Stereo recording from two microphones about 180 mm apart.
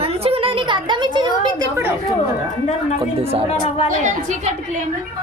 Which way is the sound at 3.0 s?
35° right (ahead or behind).